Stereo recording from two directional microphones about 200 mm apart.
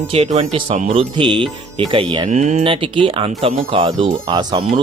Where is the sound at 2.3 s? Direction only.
35° right (ahead or behind).